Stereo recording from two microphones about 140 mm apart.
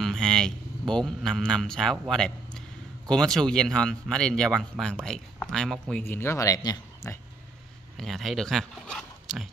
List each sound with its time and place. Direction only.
0.0 s a man's voice: 5° left (ahead or behind)
6.0 s speech: 15° left (ahead or behind)
8.0 s a man's voice: centre (ahead or behind)